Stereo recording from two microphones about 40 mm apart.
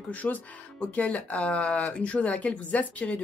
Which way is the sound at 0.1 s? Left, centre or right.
Left.